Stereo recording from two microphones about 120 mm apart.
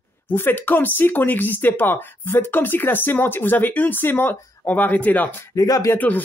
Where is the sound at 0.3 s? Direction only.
15° left (ahead or behind).